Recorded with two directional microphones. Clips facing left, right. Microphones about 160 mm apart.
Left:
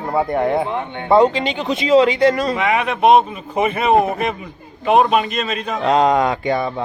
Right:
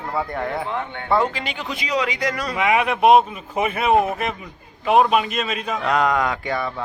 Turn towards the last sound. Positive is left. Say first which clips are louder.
# left 5 dB
turn(degrees=25)  # may be behind; listen again after turning